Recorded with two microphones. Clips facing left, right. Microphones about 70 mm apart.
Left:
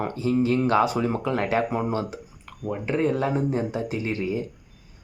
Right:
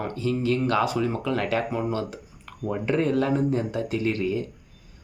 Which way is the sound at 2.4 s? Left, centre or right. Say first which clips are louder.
Right 2 dB; centre.